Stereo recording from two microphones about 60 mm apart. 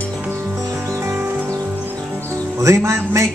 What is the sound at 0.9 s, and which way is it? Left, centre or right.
Music, right.